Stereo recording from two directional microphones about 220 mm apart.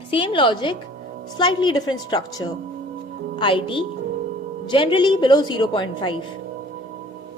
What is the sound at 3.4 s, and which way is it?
A woman's voice, 25° left (ahead or behind).